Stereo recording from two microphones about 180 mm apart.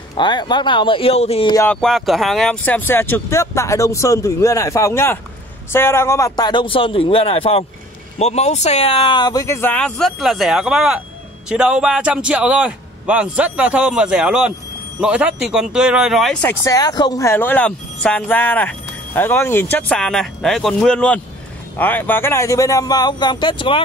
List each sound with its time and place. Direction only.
0.1 s a man's voice: 25° left (ahead or behind)
1.5 s speech: 15° left (ahead or behind)
1.8 s a man's voice: centre (ahead or behind)
16.4 s speech: 20° left (ahead or behind)